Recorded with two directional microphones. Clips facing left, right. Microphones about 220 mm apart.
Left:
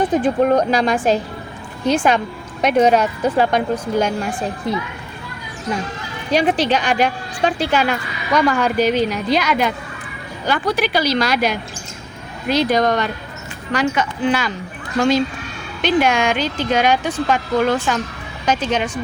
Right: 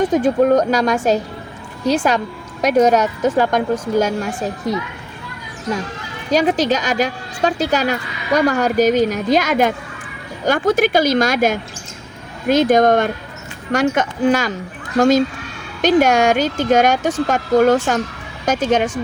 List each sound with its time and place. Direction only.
0.0 s a woman's voice: 40° right (ahead or behind)
6.3 s a woman's voice: 40° right (ahead or behind)